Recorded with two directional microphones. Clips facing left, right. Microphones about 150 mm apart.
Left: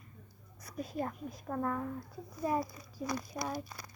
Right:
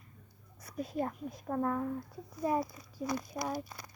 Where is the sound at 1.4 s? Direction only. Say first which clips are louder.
Right 3 dB; 10° right (ahead or behind).